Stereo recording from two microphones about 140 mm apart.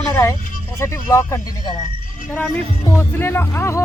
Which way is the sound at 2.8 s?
15° left (ahead or behind).